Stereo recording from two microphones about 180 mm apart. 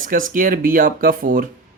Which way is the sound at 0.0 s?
45° right (ahead or behind).